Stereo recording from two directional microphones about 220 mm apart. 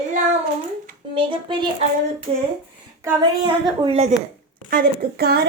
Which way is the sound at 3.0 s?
20° right (ahead or behind).